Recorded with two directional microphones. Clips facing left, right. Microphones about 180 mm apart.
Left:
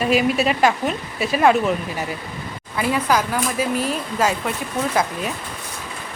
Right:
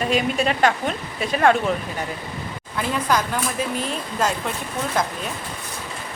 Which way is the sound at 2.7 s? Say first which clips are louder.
Left 3 dB; 5° left (ahead or behind).